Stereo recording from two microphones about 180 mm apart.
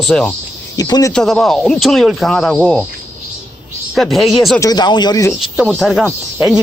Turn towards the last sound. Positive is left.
turn(degrees=-5)  # may be behind; listen again after turning